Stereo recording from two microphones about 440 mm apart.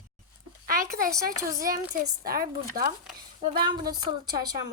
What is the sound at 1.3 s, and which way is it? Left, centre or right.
Speech, centre.